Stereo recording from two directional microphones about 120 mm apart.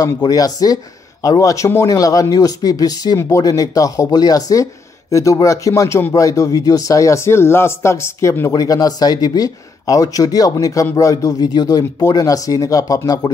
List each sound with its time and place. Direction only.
0.0 s speech: 30° left (ahead or behind)